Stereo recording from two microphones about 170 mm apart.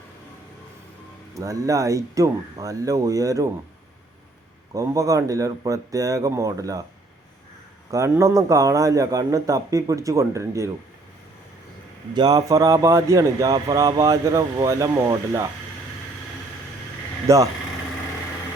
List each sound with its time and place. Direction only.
1.3 s speech: 20° right (ahead or behind)
4.7 s speech: 20° right (ahead or behind)
7.9 s speech: 15° right (ahead or behind)
12.1 s speech: 25° right (ahead or behind)
17.2 s speech: 20° right (ahead or behind)